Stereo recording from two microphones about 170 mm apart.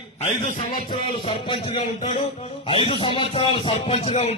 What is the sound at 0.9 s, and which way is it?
A man's voice, 30° left (ahead or behind).